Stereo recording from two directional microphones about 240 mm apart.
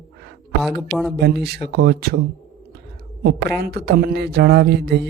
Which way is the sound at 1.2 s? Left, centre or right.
Right.